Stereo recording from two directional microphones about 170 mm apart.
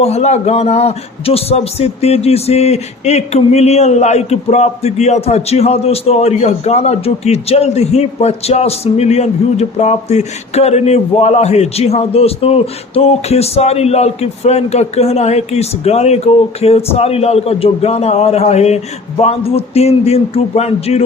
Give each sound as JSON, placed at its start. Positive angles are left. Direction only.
{"t": 0.0, "sound": "a man's voice", "side_deg": 40}